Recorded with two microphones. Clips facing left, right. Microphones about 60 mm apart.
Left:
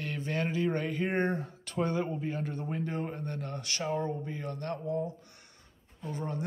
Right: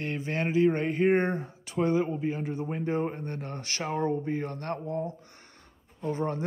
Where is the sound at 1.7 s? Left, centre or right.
Centre; by 6.5 s right.